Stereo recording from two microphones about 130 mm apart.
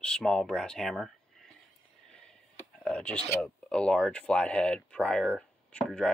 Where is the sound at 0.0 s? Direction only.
5° left (ahead or behind).